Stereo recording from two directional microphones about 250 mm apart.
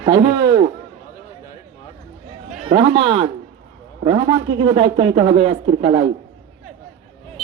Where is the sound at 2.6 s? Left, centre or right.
Centre.